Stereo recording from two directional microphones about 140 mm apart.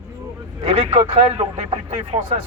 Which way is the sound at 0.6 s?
50° right (ahead or behind).